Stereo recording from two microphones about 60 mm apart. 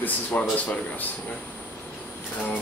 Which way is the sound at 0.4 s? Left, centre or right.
Left.